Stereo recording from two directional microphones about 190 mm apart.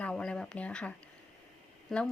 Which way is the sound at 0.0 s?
5° left (ahead or behind).